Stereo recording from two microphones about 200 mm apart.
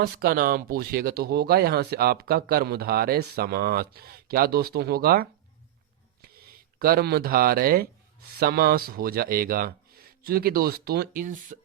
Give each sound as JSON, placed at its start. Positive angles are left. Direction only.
{"t": 0.0, "sound": "speech", "side_deg": -50}